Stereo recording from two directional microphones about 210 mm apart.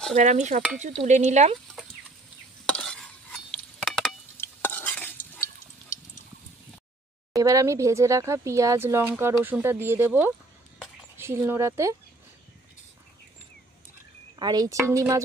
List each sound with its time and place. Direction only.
0.1 s stir: 35° right (ahead or behind)
2.7 s stir: 5° left (ahead or behind)
7.3 s speech: 15° right (ahead or behind)
14.4 s speech: 20° right (ahead or behind)